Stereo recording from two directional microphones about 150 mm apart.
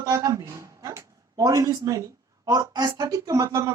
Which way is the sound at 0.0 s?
20° right (ahead or behind).